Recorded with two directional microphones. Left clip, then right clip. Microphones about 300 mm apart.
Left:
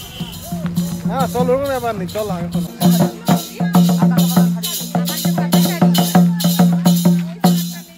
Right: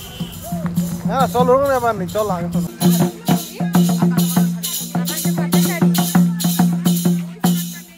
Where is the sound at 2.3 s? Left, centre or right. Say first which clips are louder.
Right 2 dB; centre.